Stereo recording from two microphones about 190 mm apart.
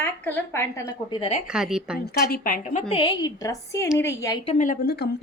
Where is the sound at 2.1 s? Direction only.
50° left (ahead or behind); by 4.4 s 15° left (ahead or behind).